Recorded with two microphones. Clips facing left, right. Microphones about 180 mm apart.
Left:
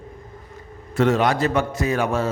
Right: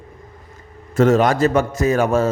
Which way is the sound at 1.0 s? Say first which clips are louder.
Right 4 dB; 45° right (ahead or behind).